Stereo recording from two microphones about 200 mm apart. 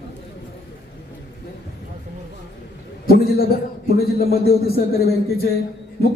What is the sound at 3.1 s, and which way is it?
A man's voice, 50° left (ahead or behind).